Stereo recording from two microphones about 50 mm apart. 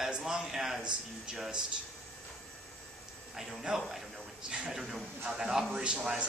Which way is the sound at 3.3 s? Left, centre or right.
Centre.